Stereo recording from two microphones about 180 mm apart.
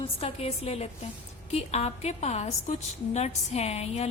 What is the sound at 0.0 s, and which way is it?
A woman's voice, 35° left (ahead or behind).